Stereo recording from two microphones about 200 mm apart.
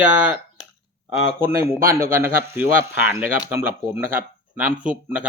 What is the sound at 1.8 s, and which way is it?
Speech, 45° right (ahead or behind).